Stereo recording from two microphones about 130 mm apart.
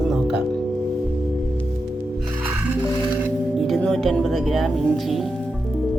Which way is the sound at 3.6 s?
Centre (ahead or behind).